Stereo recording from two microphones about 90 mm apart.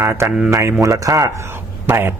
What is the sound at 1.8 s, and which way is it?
Speech, 25° right (ahead or behind).